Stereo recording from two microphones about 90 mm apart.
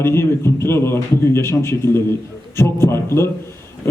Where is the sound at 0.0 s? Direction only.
30° left (ahead or behind).